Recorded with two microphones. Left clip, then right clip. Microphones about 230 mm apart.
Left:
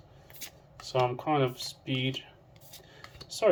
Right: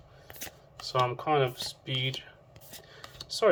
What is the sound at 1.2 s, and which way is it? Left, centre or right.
Speech, centre.